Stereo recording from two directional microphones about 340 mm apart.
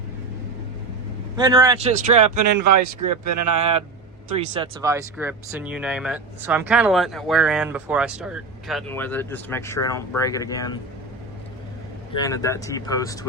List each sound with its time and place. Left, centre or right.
1.4 s speech: centre
2.3 s speech: right
3.6 s speech: centre
12.1 s speech: centre